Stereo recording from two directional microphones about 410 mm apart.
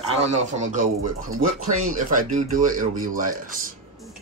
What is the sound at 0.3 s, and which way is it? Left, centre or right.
Speech, centre.